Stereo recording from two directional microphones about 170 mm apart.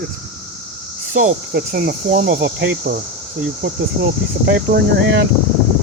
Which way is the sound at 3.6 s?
90° right.